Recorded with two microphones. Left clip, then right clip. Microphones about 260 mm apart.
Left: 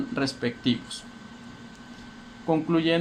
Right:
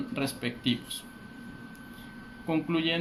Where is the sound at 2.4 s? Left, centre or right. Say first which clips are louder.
Left 5 dB; left.